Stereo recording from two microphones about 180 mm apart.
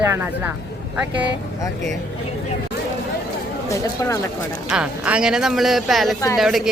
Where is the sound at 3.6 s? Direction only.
20° left (ahead or behind).